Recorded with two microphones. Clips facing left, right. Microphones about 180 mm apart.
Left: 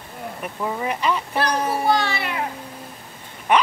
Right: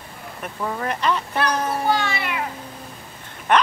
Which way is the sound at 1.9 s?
35° left (ahead or behind).